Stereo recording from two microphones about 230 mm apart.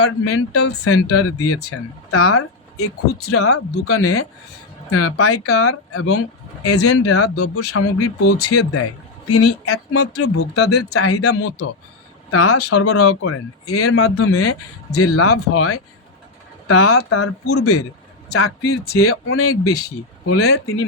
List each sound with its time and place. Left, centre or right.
0.0 s a man's voice: left